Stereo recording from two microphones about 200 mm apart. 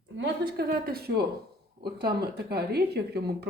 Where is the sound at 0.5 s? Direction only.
50° right (ahead or behind).